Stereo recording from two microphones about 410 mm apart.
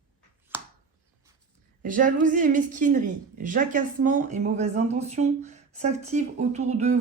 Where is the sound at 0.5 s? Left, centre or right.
Centre.